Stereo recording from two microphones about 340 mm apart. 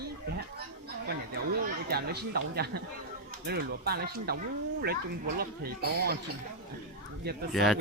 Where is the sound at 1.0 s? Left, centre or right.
Right.